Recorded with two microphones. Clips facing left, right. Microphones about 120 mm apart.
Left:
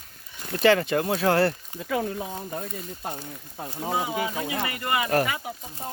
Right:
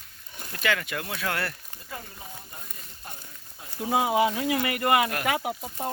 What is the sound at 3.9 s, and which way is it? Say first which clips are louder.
Speech: right 5 dB; 70° right (ahead or behind).